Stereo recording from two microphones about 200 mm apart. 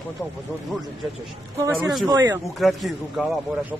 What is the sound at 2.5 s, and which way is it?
Speech, centre (ahead or behind).